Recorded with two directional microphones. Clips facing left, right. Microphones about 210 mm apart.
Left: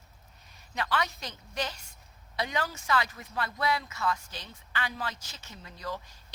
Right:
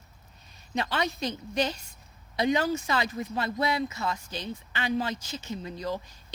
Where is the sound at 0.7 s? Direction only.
25° right (ahead or behind).